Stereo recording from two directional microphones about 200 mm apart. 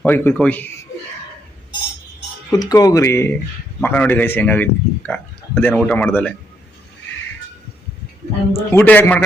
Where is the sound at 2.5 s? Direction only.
20° left (ahead or behind).